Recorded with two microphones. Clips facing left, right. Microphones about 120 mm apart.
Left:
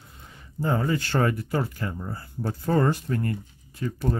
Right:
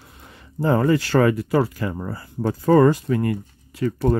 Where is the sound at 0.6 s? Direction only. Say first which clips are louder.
Right 7 dB; 90° right.